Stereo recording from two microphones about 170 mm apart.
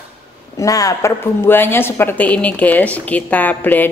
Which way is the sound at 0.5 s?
20° left (ahead or behind).